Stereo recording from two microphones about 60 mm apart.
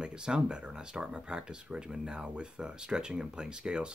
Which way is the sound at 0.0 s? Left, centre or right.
Centre.